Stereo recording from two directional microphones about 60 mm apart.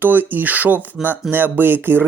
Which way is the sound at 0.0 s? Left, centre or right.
Right.